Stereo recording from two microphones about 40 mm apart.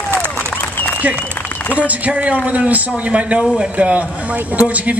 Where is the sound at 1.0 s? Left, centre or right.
Right.